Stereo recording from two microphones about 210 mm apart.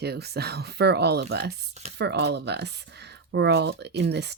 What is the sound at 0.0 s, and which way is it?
Speech, 50° right (ahead or behind).